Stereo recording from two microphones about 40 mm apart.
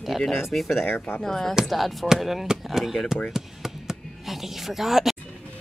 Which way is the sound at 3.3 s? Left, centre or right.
Centre.